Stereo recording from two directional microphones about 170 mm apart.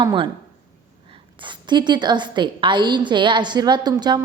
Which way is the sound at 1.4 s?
25° right (ahead or behind).